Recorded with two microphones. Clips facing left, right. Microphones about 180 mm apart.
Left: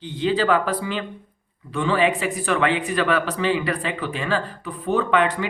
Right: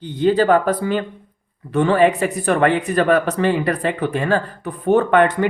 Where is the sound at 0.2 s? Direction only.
50° right (ahead or behind).